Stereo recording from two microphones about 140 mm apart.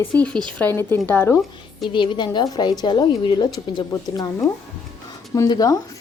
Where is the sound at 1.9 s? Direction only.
35° left (ahead or behind).